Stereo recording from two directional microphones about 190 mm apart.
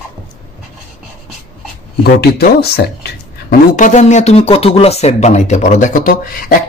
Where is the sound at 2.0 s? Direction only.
55° left (ahead or behind).